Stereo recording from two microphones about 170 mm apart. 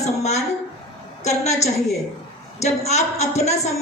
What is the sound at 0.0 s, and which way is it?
A woman's voice, 40° left (ahead or behind).